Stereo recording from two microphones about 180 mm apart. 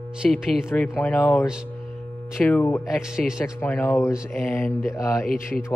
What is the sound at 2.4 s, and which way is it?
Speech, 10° left (ahead or behind).